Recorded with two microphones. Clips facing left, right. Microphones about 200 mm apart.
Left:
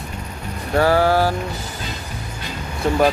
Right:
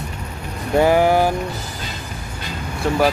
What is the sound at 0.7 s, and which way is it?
Speech, 15° right (ahead or behind).